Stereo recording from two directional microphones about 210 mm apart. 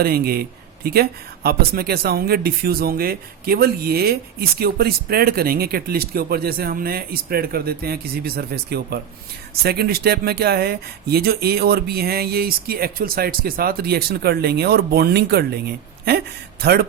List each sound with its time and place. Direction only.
0.0 s speech: 45° right (ahead or behind)